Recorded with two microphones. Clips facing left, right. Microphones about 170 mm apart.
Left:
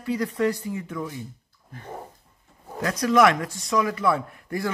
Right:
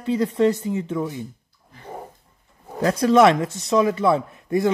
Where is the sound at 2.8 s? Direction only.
30° right (ahead or behind).